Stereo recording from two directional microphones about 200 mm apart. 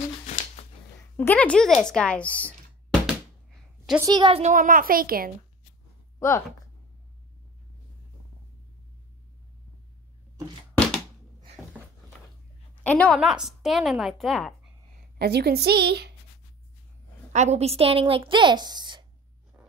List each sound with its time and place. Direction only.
0.6 s a sound: 30° left (ahead or behind)
1.1 s speech: 10° left (ahead or behind)
4.0 s a woman's voice: 20° right (ahead or behind)
4.4 s a child's voice: 40° right (ahead or behind)
6.1 s speech: 15° left (ahead or behind)
10.7 s a sound: 5° left (ahead or behind)
12.7 s a woman's voice: 5° left (ahead or behind)
15.1 s a child's voice: 50° right (ahead or behind)
17.3 s a woman's voice: 35° right (ahead or behind)